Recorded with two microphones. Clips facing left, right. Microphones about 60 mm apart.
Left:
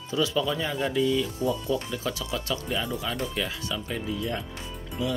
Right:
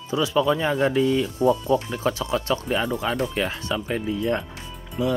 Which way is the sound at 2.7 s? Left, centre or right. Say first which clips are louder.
Right 5 dB; right.